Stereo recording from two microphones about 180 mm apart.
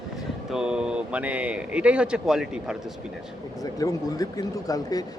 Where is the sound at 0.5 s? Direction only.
5° right (ahead or behind).